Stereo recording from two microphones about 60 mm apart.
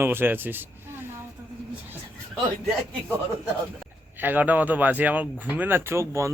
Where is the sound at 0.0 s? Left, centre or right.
Right.